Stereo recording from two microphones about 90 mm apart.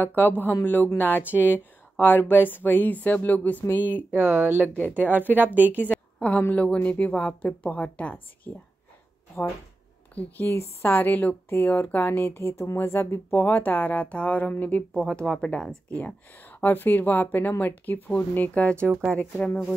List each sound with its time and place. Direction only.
0.0 s speech: 20° left (ahead or behind)
4.1 s a woman's voice: 25° right (ahead or behind)
6.1 s a woman's voice: 15° left (ahead or behind)
10.1 s a woman's voice: 20° left (ahead or behind); by 15.7 s 5° left (ahead or behind)
16.3 s speech: 20° left (ahead or behind)